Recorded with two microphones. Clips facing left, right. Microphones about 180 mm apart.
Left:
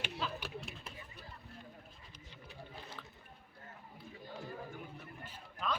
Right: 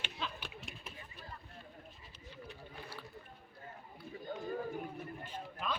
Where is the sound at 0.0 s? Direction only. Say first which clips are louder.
Left 3 dB; 5° left (ahead or behind).